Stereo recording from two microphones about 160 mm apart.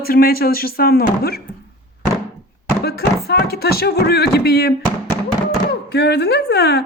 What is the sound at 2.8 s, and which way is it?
Speech, 80° left.